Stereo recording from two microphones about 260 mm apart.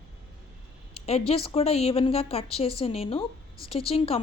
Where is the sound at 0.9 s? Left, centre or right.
Left.